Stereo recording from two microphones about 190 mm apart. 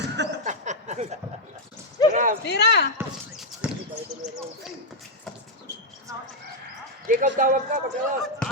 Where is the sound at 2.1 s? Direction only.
45° right (ahead or behind).